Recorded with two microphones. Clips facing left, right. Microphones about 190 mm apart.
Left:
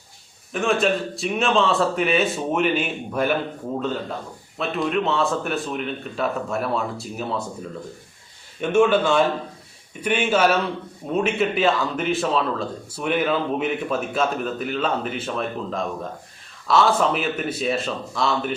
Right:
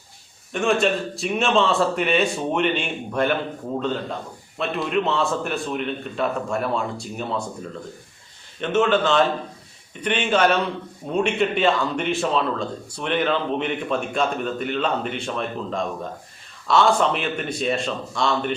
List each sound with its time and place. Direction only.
0.5 s speech: centre (ahead or behind)
4.5 s speech: centre (ahead or behind)